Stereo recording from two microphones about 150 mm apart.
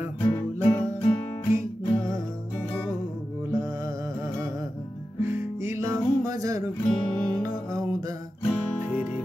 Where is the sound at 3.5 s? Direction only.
20° right (ahead or behind).